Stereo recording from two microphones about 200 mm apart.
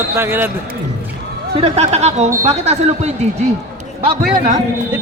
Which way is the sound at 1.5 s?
30° right (ahead or behind).